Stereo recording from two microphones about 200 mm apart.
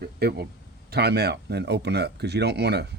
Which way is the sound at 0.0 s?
55° right (ahead or behind).